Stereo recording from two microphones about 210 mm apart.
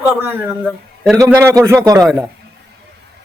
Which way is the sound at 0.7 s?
Centre (ahead or behind).